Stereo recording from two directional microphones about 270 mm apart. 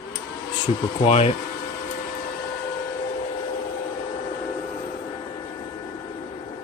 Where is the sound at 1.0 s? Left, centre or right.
Left.